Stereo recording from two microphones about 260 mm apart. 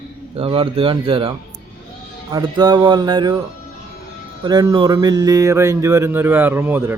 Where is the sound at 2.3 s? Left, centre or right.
Centre.